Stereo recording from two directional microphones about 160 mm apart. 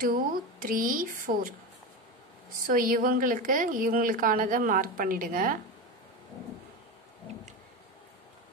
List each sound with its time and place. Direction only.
0.0 s a woman's voice: 60° right (ahead or behind)
2.6 s a woman's voice: 60° right (ahead or behind)